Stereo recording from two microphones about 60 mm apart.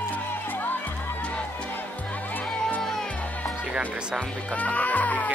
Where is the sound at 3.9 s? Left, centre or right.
Centre.